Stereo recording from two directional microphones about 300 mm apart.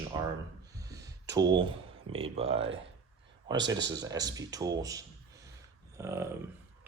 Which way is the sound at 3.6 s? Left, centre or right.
Right.